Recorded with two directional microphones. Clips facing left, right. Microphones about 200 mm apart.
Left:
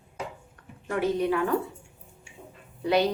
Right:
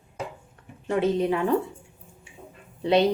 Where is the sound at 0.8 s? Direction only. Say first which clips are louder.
Right 3 dB; 25° right (ahead or behind).